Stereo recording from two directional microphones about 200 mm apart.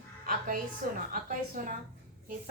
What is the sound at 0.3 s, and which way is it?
Music, 40° right (ahead or behind).